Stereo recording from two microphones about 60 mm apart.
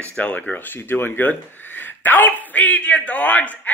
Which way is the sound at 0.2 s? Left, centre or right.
Left.